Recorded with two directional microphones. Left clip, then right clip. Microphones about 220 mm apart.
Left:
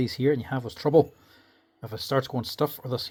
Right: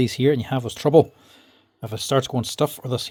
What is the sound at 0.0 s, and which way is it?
Speech, 30° right (ahead or behind).